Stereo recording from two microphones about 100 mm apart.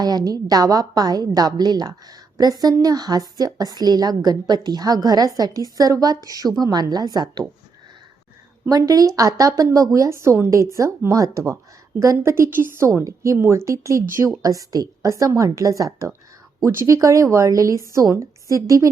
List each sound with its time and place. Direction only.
0.0 s a woman's voice: 40° right (ahead or behind)
8.7 s a woman's voice: 40° right (ahead or behind)